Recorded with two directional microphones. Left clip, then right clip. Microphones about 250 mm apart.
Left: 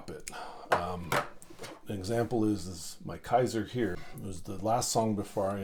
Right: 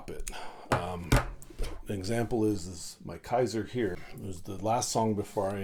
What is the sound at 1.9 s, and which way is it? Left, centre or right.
Speech, right.